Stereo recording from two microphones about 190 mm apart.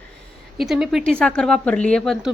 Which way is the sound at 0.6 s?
Centre (ahead or behind).